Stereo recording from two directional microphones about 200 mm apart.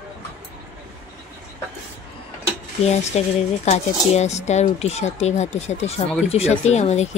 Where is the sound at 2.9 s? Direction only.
35° left (ahead or behind).